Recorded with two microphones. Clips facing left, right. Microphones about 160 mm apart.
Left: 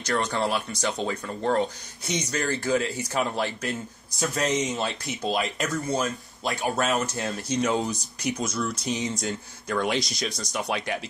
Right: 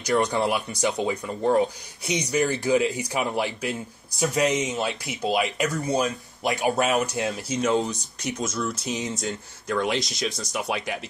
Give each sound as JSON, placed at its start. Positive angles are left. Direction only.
{"t": 0.1, "sound": "speech", "side_deg": -20}
{"t": 5.9, "sound": "speech", "side_deg": -15}
{"t": 7.2, "sound": "speech", "side_deg": -5}